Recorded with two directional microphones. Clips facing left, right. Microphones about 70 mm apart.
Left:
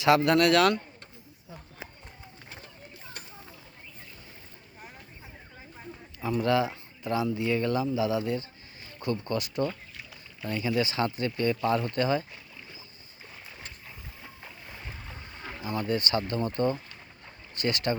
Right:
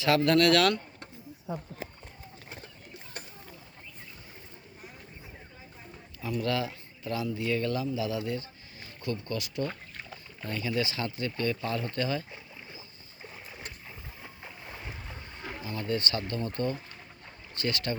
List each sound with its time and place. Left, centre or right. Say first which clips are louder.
0.0 s speech: left 2 dB; centre
6.2 s speech: left 5 dB; left
9.6 s boat: left 2 dB; right
10.5 s speech: left 3 dB; left
14.2 s boat: right 1 dB; centre
15.6 s speech: left 3 dB; left